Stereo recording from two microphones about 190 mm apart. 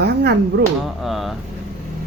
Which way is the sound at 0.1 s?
60° right (ahead or behind).